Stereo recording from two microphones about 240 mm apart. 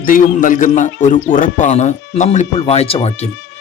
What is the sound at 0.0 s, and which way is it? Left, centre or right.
Speech, left.